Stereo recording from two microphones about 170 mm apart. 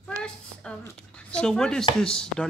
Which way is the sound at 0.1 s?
20° right (ahead or behind).